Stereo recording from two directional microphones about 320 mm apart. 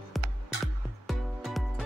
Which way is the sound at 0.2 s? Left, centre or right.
Centre.